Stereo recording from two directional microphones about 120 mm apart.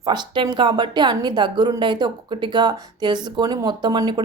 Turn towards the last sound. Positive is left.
turn(degrees=-40)  # may be behind; listen again after turning